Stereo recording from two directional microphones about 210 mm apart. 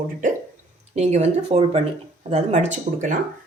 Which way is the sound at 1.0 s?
30° right (ahead or behind).